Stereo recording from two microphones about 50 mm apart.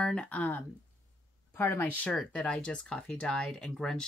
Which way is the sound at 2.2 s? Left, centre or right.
Left.